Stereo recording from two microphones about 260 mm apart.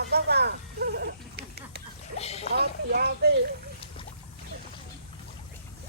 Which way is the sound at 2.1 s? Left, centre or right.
Left.